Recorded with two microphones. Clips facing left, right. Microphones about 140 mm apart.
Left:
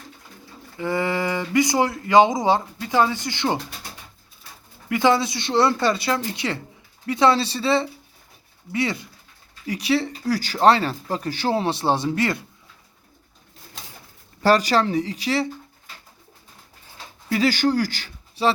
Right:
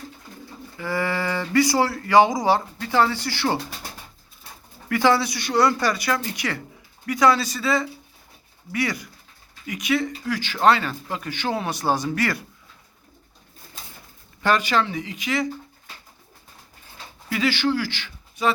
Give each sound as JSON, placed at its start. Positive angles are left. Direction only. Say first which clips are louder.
{"t": 0.8, "sound": "speech", "louder": "left 2 dB", "side_deg": 20}
{"t": 4.9, "sound": "speech", "louder": "left 1 dB", "side_deg": 20}
{"t": 14.4, "sound": "speech", "louder": "left 3 dB", "side_deg": 35}
{"t": 17.3, "sound": "speech", "louder": "left 3 dB", "side_deg": 40}